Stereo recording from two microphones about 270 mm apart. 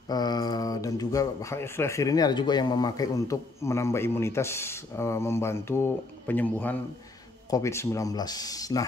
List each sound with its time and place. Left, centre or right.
0.1 s speech: centre